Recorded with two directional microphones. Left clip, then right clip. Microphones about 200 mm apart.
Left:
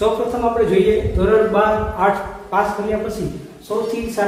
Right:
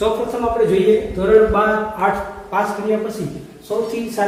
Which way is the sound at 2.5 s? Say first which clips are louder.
Left 1 dB; 20° left (ahead or behind).